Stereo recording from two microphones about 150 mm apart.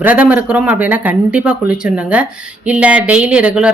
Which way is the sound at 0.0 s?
10° right (ahead or behind).